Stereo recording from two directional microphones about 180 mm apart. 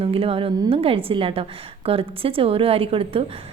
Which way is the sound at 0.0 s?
30° right (ahead or behind).